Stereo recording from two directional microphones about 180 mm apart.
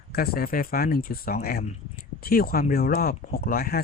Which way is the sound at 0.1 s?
60° left (ahead or behind).